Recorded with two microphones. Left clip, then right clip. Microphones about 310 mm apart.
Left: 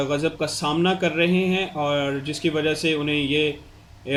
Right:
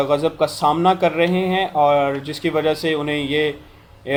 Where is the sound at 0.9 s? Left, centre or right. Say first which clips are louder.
Right 5 dB; centre.